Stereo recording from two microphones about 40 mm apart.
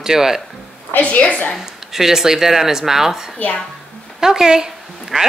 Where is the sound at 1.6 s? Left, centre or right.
Centre.